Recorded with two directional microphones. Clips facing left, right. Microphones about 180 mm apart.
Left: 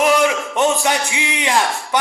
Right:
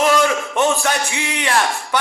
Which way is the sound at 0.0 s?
15° left (ahead or behind).